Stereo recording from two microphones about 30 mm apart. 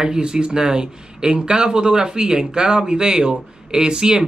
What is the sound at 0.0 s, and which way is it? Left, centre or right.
Speech, right.